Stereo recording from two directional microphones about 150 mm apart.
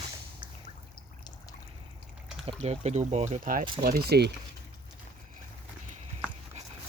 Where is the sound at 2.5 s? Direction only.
45° right (ahead or behind).